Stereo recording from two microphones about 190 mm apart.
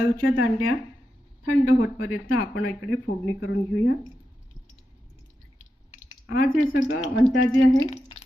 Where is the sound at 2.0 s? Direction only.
90° left.